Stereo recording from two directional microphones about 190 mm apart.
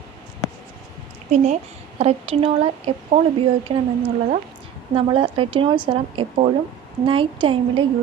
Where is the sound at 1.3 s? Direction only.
40° right (ahead or behind).